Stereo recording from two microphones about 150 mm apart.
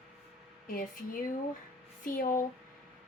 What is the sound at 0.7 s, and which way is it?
A woman's voice, 65° left (ahead or behind).